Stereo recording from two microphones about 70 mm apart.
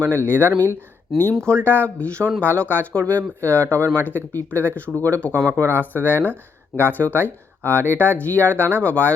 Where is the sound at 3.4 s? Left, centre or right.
Right.